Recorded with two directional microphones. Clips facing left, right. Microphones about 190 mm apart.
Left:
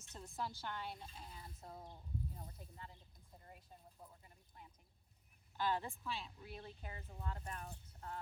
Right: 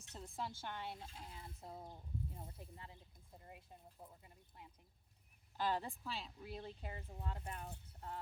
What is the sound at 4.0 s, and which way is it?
Speech, 25° right (ahead or behind).